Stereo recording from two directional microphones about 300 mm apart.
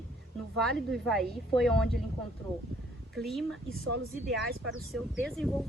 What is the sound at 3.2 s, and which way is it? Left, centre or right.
Speech, centre.